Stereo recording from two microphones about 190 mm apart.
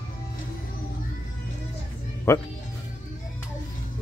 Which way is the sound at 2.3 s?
15° left (ahead or behind).